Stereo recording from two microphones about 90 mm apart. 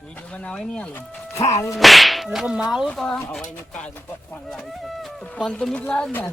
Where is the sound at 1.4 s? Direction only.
35° left (ahead or behind).